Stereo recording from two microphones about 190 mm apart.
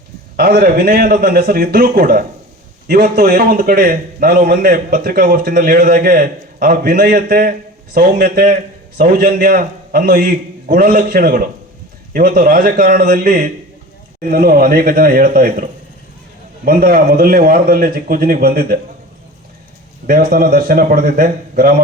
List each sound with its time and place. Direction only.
0.3 s a man's voice: 50° right (ahead or behind)
16.6 s a man's voice: 50° right (ahead or behind)
20.1 s a man's voice: 50° right (ahead or behind)